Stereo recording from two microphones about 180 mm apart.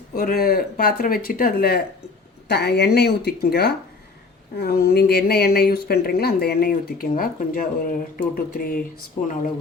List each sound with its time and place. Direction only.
0.1 s speech: 55° left (ahead or behind)